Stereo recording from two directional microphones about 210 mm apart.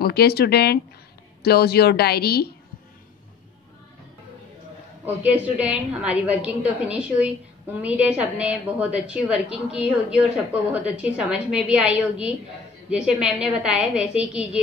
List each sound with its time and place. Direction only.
0.0 s a woman's voice: 50° left (ahead or behind)
5.0 s a woman's voice: 5° right (ahead or behind)